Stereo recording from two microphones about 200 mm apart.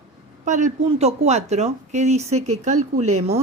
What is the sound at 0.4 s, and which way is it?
Speech, 35° right (ahead or behind).